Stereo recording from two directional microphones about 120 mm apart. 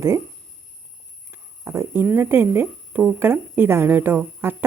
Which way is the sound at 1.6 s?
20° right (ahead or behind).